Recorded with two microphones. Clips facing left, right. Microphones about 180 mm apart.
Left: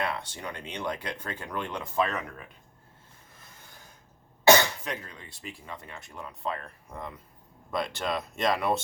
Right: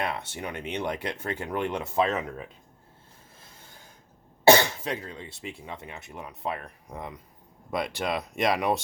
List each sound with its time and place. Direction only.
0.0 s speech: 20° right (ahead or behind)
4.4 s speech: 30° right (ahead or behind)